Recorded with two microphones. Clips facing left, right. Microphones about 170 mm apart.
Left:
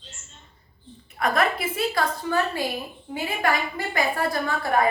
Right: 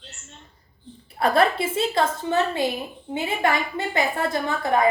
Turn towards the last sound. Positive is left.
turn(degrees=-20)  # may be behind; listen again after turning